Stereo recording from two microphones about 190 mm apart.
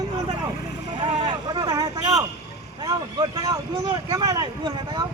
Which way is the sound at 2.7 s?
20° right (ahead or behind).